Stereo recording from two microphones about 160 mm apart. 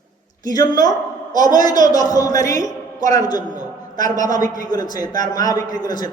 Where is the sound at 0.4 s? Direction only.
25° left (ahead or behind).